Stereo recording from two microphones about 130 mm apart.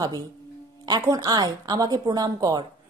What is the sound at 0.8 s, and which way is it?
A woman's voice, 30° right (ahead or behind).